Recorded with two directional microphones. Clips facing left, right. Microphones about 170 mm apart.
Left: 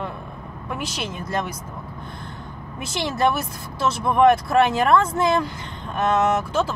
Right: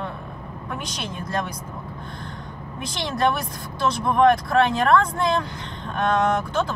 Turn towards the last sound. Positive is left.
turn(degrees=5)  # may be behind; listen again after turning